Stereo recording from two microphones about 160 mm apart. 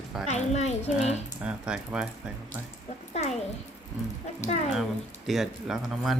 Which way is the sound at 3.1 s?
45° left (ahead or behind).